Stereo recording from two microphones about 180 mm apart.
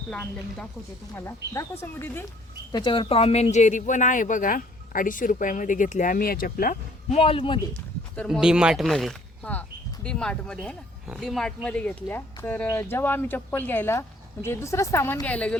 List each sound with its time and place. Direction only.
0.1 s speech: 5° left (ahead or behind)
2.7 s speech: 25° left (ahead or behind); by 7.2 s 50° left (ahead or behind)
7.2 s a man's voice: 30° left (ahead or behind)
8.1 s speech: 5° left (ahead or behind)
8.4 s speech: 5° right (ahead or behind)